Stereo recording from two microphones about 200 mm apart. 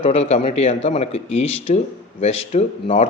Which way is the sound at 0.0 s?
30° left (ahead or behind).